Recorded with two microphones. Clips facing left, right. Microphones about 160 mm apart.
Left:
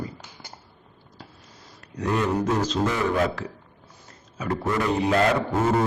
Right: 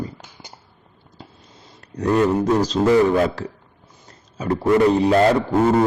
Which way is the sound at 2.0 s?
35° right (ahead or behind).